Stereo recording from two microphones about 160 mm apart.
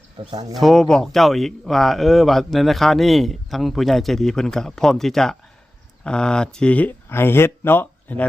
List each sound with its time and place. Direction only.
0.3 s speech: 25° right (ahead or behind)
0.5 s speech: centre (ahead or behind)